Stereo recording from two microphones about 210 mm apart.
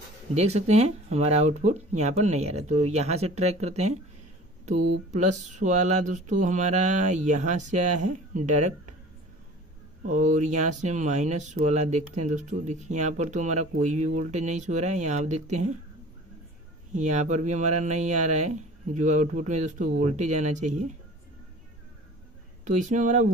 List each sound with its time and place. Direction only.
0.3 s speech: 30° right (ahead or behind)
10.0 s speech: 35° right (ahead or behind)
16.9 s speech: 35° right (ahead or behind)
22.7 s speech: 35° right (ahead or behind)